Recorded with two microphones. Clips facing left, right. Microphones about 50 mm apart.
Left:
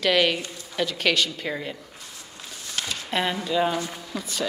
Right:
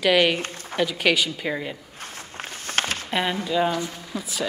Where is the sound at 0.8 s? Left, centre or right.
Centre.